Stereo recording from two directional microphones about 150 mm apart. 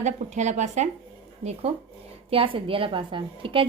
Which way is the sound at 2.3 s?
40° right (ahead or behind).